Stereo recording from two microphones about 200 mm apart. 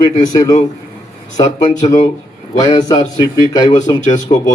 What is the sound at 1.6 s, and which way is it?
Speech, 20° left (ahead or behind).